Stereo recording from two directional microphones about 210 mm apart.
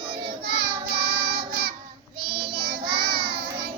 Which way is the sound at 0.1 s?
25° right (ahead or behind).